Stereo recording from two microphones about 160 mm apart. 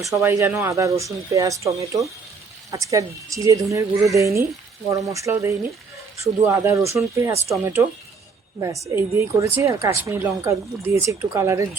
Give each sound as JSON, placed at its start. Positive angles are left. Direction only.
{"t": 0.1, "sound": "a woman's voice", "side_deg": -20}